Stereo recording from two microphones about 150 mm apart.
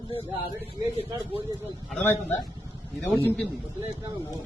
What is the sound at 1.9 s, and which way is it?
Speech, 10° left (ahead or behind).